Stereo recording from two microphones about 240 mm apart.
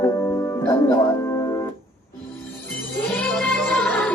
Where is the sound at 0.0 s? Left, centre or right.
Centre.